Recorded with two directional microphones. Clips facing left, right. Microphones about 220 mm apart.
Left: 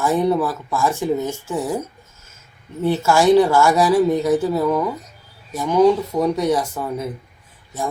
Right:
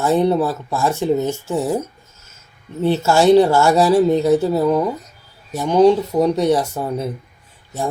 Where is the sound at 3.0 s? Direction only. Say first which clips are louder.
Right 2 dB; 25° right (ahead or behind).